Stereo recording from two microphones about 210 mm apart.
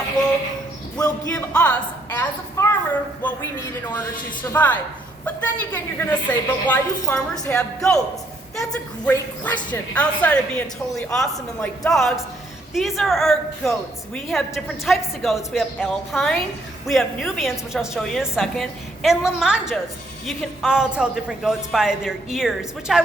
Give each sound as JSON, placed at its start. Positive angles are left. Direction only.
{"t": 0.9, "sound": "a woman's voice", "side_deg": 15}
{"t": 4.5, "sound": "a woman's voice", "side_deg": 10}
{"t": 9.0, "sound": "a woman's voice", "side_deg": 10}